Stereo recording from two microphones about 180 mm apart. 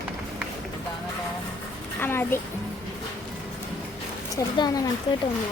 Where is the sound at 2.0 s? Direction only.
10° left (ahead or behind).